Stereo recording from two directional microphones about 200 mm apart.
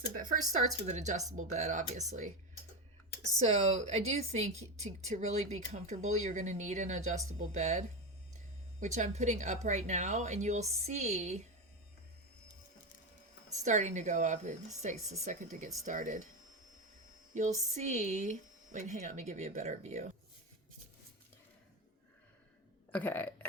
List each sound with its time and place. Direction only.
0.1 s a woman's voice: 40° right (ahead or behind)
3.4 s a woman's voice: 35° right (ahead or behind)
13.7 s a woman's voice: 35° right (ahead or behind)
17.7 s a woman's voice: 35° right (ahead or behind)
22.9 s speech: 10° left (ahead or behind)